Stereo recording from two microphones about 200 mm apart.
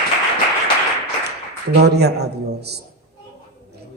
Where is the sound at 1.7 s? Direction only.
55° right (ahead or behind).